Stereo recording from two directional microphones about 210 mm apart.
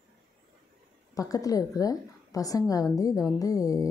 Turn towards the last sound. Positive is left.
turn(degrees=15)  # may be behind; listen again after turning